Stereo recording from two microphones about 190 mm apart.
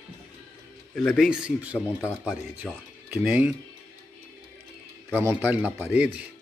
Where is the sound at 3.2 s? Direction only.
10° right (ahead or behind).